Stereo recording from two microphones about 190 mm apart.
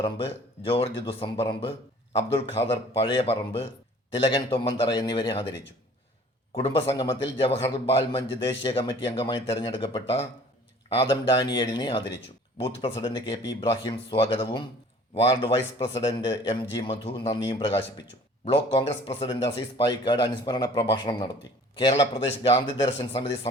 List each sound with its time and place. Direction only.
0.0 s a man's voice: 30° left (ahead or behind)